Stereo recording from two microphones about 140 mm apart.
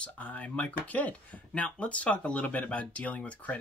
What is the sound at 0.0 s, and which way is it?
Speech, 10° left (ahead or behind).